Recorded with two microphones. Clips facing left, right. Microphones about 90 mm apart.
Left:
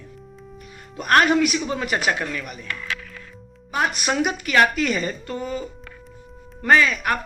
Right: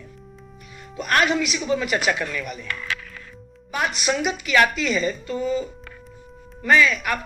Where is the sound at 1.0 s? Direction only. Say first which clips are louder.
Left 4 dB; 45° left (ahead or behind); by 2.7 s 25° left (ahead or behind).